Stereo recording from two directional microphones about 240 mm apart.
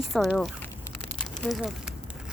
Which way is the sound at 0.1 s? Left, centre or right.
Centre.